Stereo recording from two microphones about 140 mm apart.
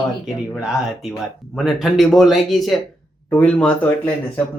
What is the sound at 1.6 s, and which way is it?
Speech, centre (ahead or behind).